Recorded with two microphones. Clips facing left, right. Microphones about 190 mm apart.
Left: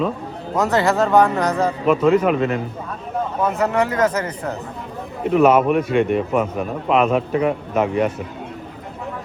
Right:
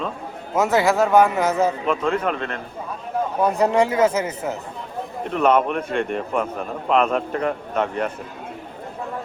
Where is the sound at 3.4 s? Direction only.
15° right (ahead or behind).